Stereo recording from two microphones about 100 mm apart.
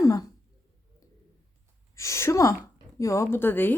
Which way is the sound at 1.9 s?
30° left (ahead or behind).